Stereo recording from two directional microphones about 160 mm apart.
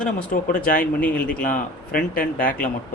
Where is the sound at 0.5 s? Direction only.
65° left (ahead or behind).